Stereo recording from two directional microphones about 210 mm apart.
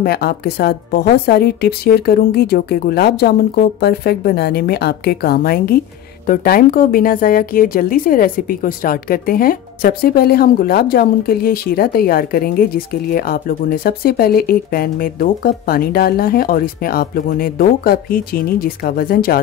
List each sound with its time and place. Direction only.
0.0 s speech: 50° left (ahead or behind)